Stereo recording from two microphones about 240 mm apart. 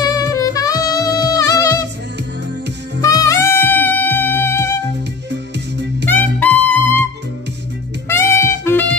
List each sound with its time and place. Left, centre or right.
0.0 s music: centre
3.0 s music: centre
5.3 s music: right
6.0 s music: centre
8.1 s music: centre